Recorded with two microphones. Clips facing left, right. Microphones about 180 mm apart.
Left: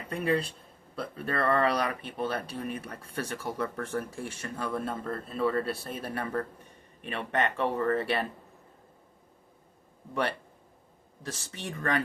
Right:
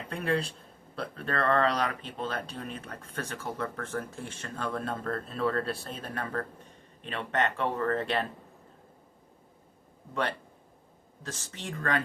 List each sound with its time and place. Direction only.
0.1 s speech: 5° left (ahead or behind)
11.5 s speech: 15° left (ahead or behind)